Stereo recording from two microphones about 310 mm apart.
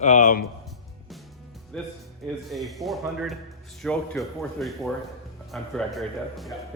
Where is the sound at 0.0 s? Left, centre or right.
Left.